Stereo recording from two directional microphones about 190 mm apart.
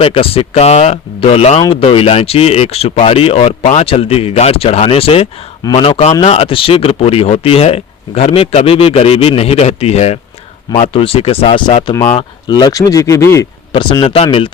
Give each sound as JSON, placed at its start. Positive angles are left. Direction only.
{"t": 0.0, "sound": "speech", "side_deg": 30}